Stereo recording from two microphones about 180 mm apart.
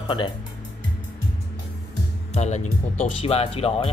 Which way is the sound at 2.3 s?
40° left (ahead or behind).